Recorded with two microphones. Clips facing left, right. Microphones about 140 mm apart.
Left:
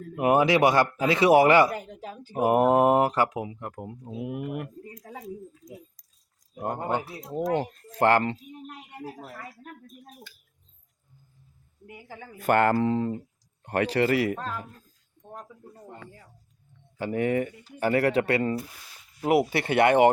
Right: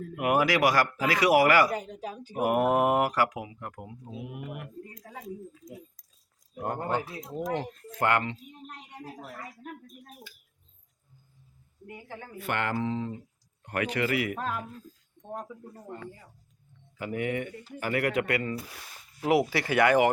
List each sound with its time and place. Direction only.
0.2 s speech: 25° left (ahead or behind)
3.8 s speech: 50° left (ahead or behind)
6.6 s speech: 15° left (ahead or behind)
7.6 s speech: 35° left (ahead or behind)
8.6 s a sound: 5° left (ahead or behind)
12.4 s speech: 45° left (ahead or behind)
12.7 s speech: 55° left (ahead or behind)
13.7 s speech: 35° left (ahead or behind)
14.3 s speech: 10° right (ahead or behind)
17.0 s speech: 35° left (ahead or behind)